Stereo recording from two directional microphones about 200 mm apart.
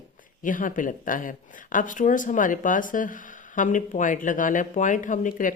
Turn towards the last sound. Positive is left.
turn(degrees=40)  # may be behind; listen again after turning